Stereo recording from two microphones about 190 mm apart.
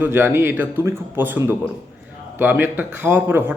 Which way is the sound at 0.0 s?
10° right (ahead or behind).